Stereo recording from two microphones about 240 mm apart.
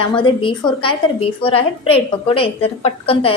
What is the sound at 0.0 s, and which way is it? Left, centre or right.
A woman's voice, left.